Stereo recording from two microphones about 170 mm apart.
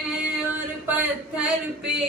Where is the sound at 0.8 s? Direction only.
10° right (ahead or behind).